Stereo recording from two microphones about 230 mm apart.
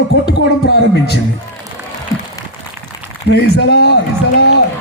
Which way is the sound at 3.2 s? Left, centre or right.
Left.